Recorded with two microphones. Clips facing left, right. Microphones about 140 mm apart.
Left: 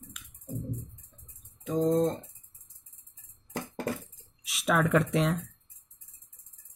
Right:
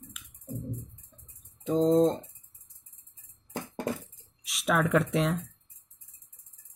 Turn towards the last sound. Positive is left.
turn(degrees=0)  # may be behind; listen again after turning